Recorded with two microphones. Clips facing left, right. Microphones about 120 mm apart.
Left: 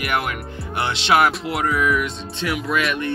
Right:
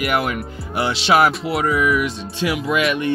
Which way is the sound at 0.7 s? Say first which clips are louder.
Right 2 dB; 5° right (ahead or behind).